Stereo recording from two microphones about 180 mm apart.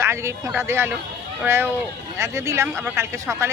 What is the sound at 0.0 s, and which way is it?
Speech, 15° right (ahead or behind).